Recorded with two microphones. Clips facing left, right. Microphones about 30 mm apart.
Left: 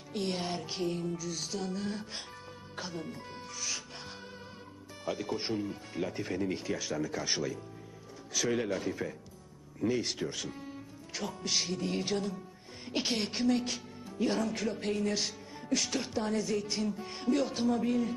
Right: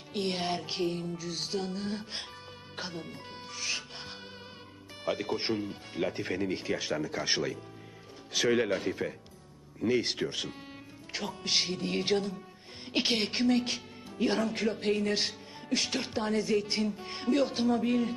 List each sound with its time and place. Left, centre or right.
0.1 s a woman's voice: right